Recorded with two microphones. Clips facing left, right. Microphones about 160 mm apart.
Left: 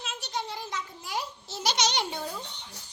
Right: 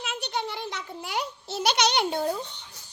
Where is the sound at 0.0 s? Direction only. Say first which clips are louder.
Right 4 dB; 65° right (ahead or behind).